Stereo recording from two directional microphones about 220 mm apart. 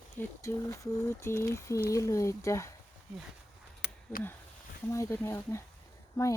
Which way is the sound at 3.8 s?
50° left (ahead or behind).